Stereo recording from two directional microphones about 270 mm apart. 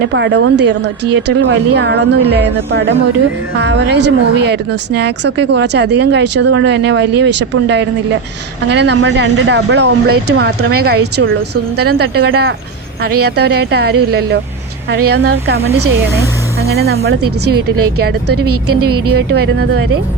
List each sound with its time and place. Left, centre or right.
0.1 s speech: right
11.0 s a woman's voice: right
11.8 s speech: right
17.2 s a woman's voice: right
19.1 s speech: right